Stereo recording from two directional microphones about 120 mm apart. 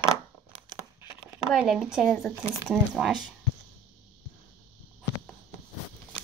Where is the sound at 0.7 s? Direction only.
20° right (ahead or behind).